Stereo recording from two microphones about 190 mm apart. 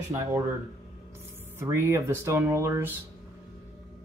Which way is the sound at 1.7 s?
15° right (ahead or behind).